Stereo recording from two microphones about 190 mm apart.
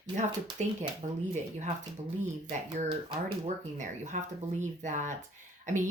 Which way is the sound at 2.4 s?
35° right (ahead or behind).